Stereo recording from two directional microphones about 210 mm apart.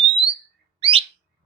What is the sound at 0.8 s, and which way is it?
Bird, 25° right (ahead or behind).